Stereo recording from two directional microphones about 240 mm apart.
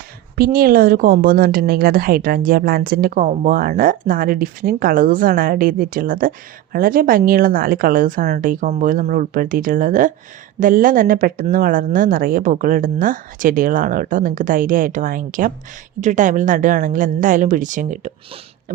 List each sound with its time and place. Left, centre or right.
0.3 s a woman's voice: right